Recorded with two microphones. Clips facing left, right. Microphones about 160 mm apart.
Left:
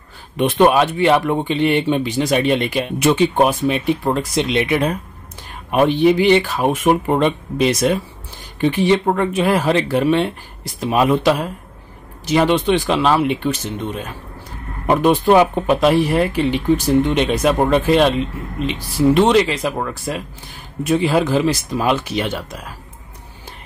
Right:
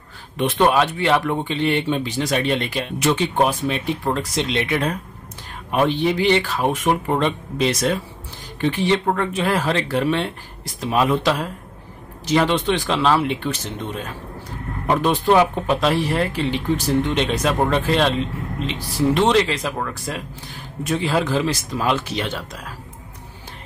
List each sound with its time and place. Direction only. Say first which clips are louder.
0.4 s speech: left 4 dB; 15° left (ahead or behind)
19.1 s speech: left 2 dB; 10° left (ahead or behind)